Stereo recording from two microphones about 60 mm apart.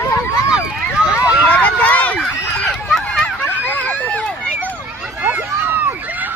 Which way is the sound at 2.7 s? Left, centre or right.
Centre.